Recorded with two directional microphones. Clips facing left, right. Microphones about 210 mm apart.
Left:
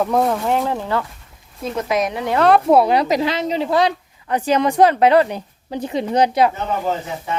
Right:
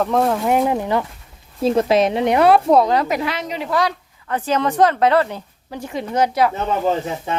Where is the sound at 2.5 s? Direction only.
5° left (ahead or behind).